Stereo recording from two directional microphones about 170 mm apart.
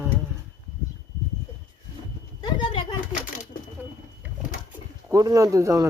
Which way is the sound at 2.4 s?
30° left (ahead or behind).